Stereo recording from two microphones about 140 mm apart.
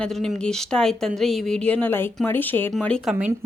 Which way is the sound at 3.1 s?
5° right (ahead or behind).